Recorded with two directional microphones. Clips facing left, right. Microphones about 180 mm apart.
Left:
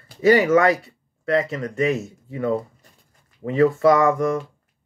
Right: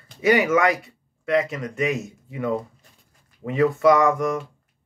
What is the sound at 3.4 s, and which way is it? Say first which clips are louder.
Speech: left 1 dB; 20° right (ahead or behind).